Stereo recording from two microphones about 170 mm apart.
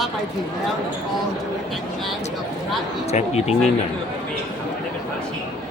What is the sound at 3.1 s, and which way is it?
Speech, 40° left (ahead or behind).